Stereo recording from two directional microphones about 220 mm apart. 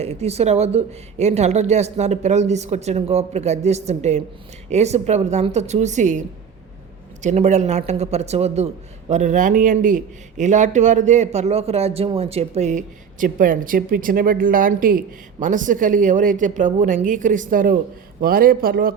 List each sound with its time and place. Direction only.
0.0 s a man's voice: 30° right (ahead or behind)